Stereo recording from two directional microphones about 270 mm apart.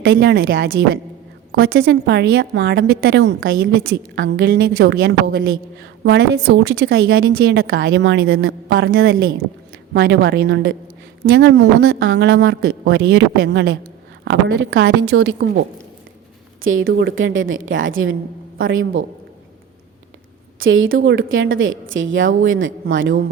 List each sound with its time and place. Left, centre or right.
0.0 s a woman's voice: right
16.8 s a woman's voice: right
20.6 s a woman's voice: right